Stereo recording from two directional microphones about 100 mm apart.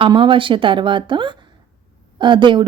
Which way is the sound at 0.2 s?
55° right (ahead or behind).